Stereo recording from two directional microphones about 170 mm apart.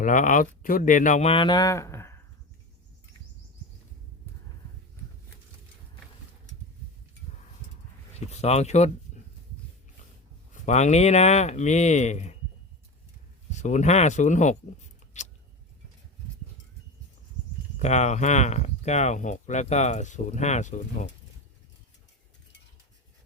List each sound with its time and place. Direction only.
0.0 s speech: 50° left (ahead or behind)
1.3 s speech: 30° left (ahead or behind)
8.1 s speech: 40° left (ahead or behind)
10.5 s speech: 45° left (ahead or behind)
13.5 s speech: 45° left (ahead or behind)
15.1 s a sound: 45° left (ahead or behind)
17.7 s speech: 45° left (ahead or behind)